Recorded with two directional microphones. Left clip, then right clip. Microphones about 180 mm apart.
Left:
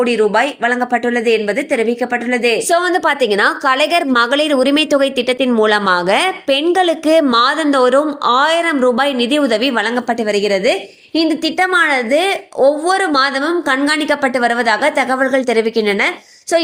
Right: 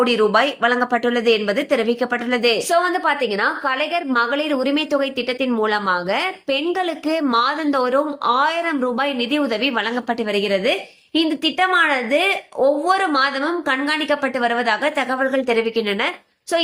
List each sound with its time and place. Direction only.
0.0 s a woman's voice: 10° left (ahead or behind)
2.6 s a woman's voice: 35° left (ahead or behind)